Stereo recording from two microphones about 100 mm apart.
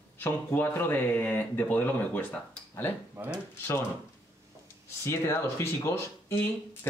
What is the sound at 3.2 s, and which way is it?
Speech, 25° right (ahead or behind).